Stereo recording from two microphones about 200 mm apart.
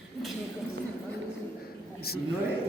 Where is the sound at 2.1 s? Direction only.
50° left (ahead or behind).